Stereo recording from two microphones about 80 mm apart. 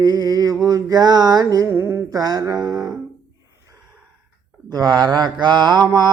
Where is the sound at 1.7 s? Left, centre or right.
Right.